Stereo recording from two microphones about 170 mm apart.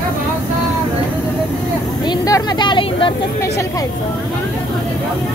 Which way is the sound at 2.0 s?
25° left (ahead or behind).